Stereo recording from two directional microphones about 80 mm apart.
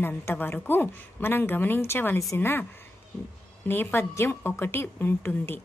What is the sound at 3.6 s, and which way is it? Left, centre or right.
A woman's voice, left.